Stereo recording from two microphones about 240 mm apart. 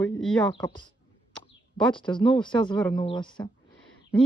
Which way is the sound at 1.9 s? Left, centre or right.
Centre.